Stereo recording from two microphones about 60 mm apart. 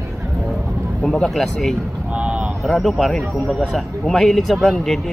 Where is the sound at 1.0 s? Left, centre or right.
Centre.